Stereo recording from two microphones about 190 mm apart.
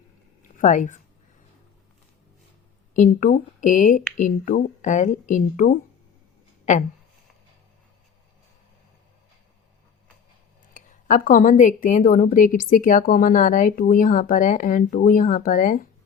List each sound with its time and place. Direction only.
0.5 s a woman's voice: 45° left (ahead or behind)
2.9 s a woman's voice: 45° left (ahead or behind)
10.8 s a woman's voice: 45° left (ahead or behind)